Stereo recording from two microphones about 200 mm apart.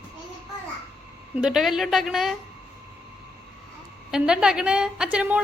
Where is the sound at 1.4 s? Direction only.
Centre (ahead or behind).